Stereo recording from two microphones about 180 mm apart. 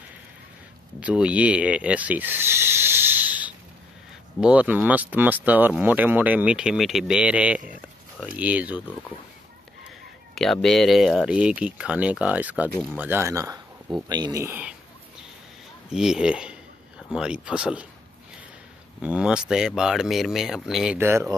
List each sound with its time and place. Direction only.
1.0 s speech: 5° right (ahead or behind)
10.3 s speech: centre (ahead or behind); by 14.7 s 15° right (ahead or behind)
15.9 s speech: 5° right (ahead or behind)
18.9 s speech: 5° right (ahead or behind)